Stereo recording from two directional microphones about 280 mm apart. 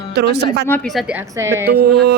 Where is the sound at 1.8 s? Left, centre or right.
Right.